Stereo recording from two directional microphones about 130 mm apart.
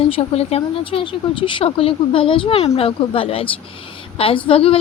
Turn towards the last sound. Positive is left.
turn(degrees=45)  # may be behind; listen again after turning